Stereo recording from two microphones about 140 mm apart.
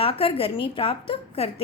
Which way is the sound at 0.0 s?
40° left (ahead or behind).